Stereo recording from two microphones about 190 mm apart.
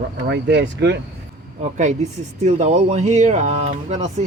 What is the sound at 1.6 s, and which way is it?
Speech, 40° right (ahead or behind).